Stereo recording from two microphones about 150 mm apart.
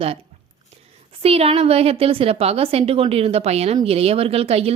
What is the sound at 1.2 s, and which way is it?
A woman's voice, 40° right (ahead or behind).